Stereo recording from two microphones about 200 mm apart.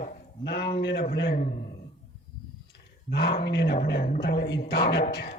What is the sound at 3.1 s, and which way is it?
Speech, 55° left (ahead or behind).